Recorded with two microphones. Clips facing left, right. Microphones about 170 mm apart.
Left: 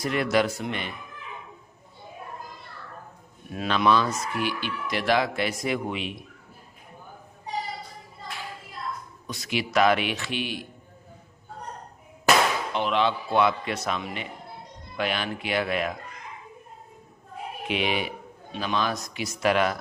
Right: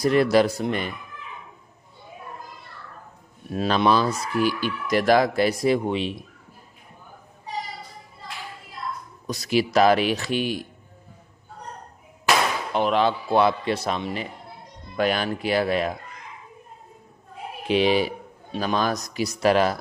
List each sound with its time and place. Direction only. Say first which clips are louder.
0.0 s speech: right 6 dB; 35° right (ahead or behind)
3.5 s speech: right 2 dB; 35° right (ahead or behind)
9.2 s speech: right 7 dB; 40° right (ahead or behind)
12.7 s speech: right 6 dB; 45° right (ahead or behind)
17.7 s speech: right 8 dB; 35° right (ahead or behind)